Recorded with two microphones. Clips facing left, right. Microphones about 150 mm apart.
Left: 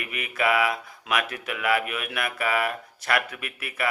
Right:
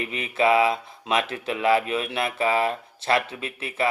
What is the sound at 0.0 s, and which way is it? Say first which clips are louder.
Speech: right 4 dB; 25° right (ahead or behind).